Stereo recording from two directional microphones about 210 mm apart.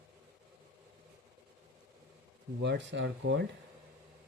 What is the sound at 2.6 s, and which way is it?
Speech, 55° right (ahead or behind).